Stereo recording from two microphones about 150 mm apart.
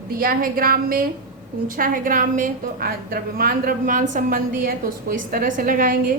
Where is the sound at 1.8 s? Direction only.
65° right (ahead or behind).